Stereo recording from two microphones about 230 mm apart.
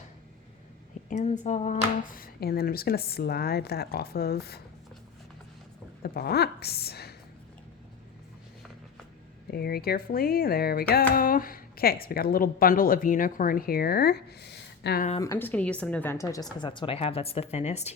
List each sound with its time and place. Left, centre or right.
1.1 s speech: left
6.0 s speech: left
9.5 s speech: left
15.2 s a woman's voice: centre; by 17.9 s left